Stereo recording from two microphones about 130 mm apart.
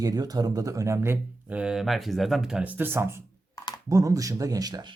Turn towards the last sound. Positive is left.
turn(degrees=-30)  # may be behind; listen again after turning